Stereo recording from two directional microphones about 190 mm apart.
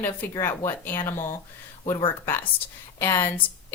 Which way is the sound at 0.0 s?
10° left (ahead or behind).